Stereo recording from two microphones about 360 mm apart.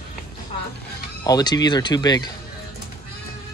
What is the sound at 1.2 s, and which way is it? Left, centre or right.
Speech, centre.